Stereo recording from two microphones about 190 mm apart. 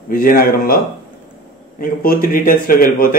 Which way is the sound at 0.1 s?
50° left (ahead or behind).